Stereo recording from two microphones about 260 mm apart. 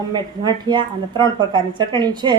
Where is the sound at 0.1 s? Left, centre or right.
Centre.